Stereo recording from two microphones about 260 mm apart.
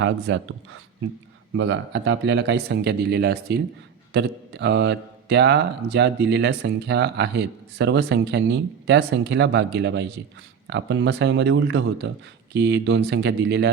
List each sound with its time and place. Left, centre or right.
0.0 s speech: right